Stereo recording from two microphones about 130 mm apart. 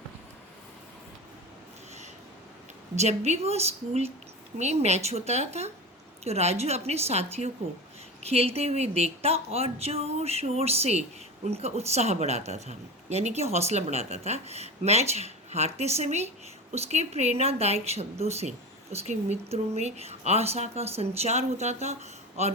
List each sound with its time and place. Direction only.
2.9 s a woman's voice: 60° right (ahead or behind)